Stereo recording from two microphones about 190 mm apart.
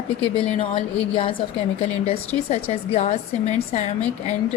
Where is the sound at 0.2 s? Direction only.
30° left (ahead or behind).